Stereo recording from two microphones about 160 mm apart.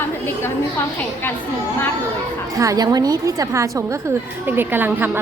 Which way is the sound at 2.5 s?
20° right (ahead or behind).